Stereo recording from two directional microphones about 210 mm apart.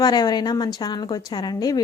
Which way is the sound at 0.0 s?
20° left (ahead or behind).